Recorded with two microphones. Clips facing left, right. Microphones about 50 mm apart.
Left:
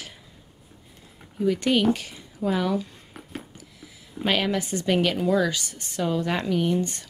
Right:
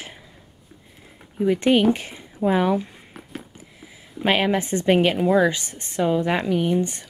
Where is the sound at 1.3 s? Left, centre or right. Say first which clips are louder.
Right 4 dB; right.